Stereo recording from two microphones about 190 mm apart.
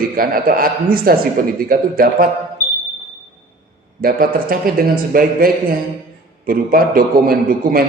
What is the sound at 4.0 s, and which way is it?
A man's voice, 50° right (ahead or behind).